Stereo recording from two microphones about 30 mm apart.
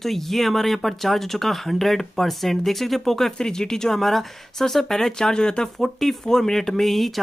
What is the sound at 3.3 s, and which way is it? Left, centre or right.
Speech, left.